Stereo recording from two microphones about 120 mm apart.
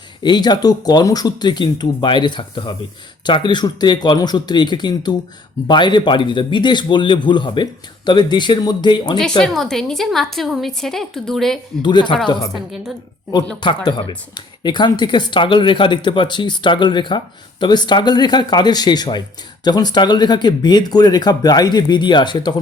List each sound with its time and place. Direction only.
0.2 s speech: 35° left (ahead or behind)
9.4 s a woman's voice: 5° left (ahead or behind)
11.8 s speech: 40° left (ahead or behind)
13.6 s speech: 40° left (ahead or behind)